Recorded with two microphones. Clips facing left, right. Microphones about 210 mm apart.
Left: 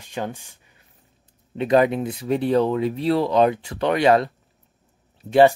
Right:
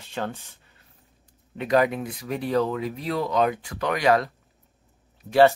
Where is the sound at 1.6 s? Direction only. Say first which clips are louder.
Left 4 dB; 25° left (ahead or behind).